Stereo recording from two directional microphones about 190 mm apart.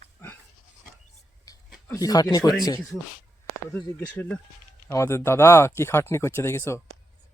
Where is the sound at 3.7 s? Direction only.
5° left (ahead or behind).